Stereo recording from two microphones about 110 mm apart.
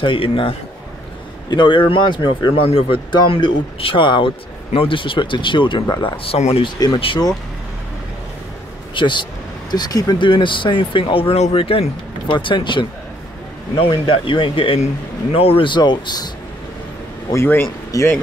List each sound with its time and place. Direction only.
0.0 s speech: 50° left (ahead or behind)
6.0 s speech: 65° left (ahead or behind)
6.6 s speech: 50° left (ahead or behind)
8.9 s speech: 45° left (ahead or behind)
17.3 s speech: 20° left (ahead or behind)